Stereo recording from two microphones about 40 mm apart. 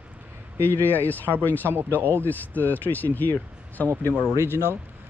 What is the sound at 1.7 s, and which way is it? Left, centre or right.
Speech, right.